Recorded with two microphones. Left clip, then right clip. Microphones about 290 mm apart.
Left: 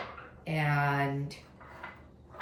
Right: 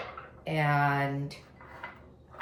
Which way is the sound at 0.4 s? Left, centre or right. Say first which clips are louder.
Right 3 dB; centre.